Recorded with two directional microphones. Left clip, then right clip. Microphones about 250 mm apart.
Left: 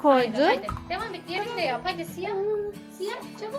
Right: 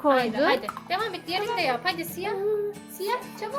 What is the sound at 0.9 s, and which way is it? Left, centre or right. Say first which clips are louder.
A woman's voice: right 7 dB; right.